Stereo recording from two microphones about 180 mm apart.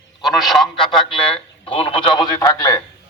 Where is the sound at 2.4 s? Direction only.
20° left (ahead or behind).